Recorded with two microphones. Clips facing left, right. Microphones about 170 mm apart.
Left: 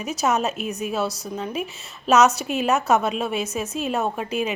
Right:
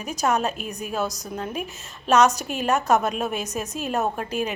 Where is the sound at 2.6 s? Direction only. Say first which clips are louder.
Even; 5° left (ahead or behind).